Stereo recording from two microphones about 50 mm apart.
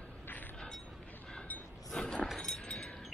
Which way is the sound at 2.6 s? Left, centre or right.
Centre.